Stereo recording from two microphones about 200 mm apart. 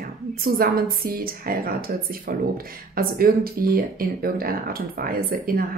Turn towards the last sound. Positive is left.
turn(degrees=-45)  # may be behind; listen again after turning